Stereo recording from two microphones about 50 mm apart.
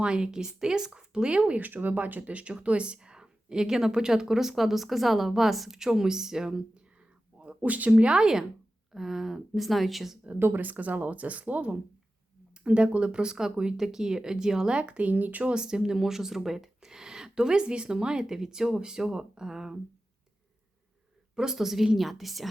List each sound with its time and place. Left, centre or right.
0.0 s speech: centre
1.5 s speech: right; by 6.8 s centre
7.3 s speech: right; by 10.2 s centre
10.3 s speech: right; by 14.8 s centre
14.8 s speech: right
15.4 s speech: centre
21.3 s a woman's voice: centre